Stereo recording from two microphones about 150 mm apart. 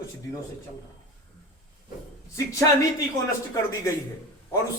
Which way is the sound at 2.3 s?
20° left (ahead or behind).